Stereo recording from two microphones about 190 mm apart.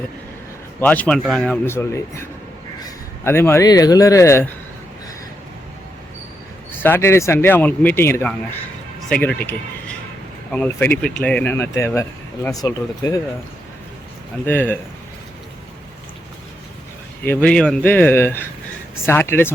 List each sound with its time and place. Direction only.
0.8 s speech: 10° left (ahead or behind)
6.8 s speech: 10° left (ahead or behind)
14.4 s speech: 10° left (ahead or behind)
17.2 s speech: 5° left (ahead or behind)